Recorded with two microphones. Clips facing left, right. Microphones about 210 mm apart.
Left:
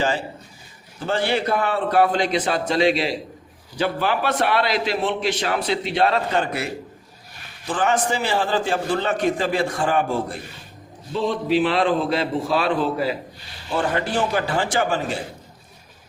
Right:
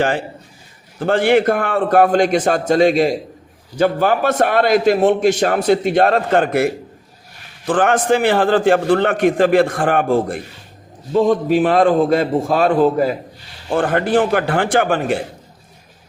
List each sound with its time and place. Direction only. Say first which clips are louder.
0.9 s a man's voice: right 8 dB; 55° right (ahead or behind)
7.7 s a man's voice: right 7 dB; 55° right (ahead or behind)